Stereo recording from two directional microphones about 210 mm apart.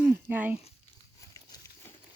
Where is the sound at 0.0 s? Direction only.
10° right (ahead or behind).